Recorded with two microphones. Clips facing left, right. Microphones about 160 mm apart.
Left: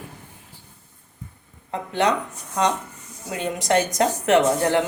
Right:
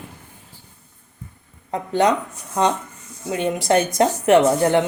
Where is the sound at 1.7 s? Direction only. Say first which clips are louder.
Right 3 dB; 35° right (ahead or behind).